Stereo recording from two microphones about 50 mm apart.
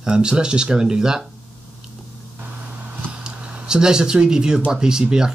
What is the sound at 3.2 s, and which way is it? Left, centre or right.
Speech, centre.